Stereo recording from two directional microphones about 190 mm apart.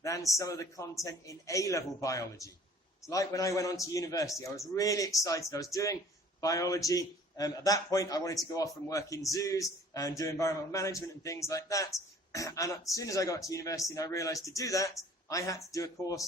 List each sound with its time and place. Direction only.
0.3 s a man's voice: 15° left (ahead or behind)